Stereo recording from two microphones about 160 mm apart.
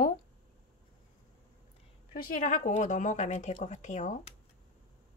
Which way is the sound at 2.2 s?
60° left (ahead or behind).